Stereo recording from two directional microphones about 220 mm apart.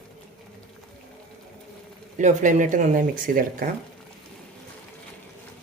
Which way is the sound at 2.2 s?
35° right (ahead or behind).